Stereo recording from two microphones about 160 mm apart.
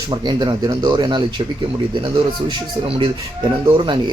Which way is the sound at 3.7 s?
30° right (ahead or behind).